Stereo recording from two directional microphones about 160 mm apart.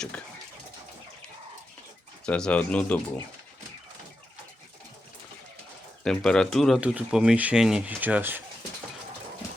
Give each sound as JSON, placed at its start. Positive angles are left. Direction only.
{"t": 2.2, "sound": "speech", "side_deg": 5}
{"t": 6.1, "sound": "speech", "side_deg": 5}